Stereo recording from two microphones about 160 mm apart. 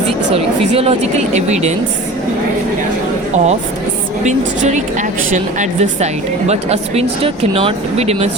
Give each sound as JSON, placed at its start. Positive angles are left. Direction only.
{"t": 0.3, "sound": "speech", "side_deg": -40}
{"t": 3.3, "sound": "speech", "side_deg": -45}